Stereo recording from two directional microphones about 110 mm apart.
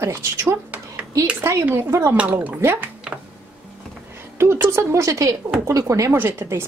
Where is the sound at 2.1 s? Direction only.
15° right (ahead or behind).